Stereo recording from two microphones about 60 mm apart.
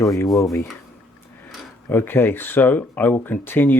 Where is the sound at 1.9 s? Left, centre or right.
Left.